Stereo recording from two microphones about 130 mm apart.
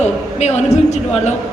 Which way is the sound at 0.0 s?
60° left (ahead or behind).